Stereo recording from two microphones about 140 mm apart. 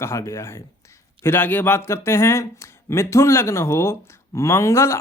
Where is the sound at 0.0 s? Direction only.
20° left (ahead or behind).